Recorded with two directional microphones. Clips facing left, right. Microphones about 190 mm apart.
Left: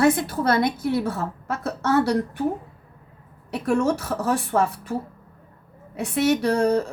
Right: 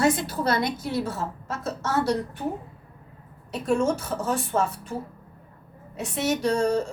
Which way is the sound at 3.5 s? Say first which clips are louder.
Left 2 dB; 65° left (ahead or behind).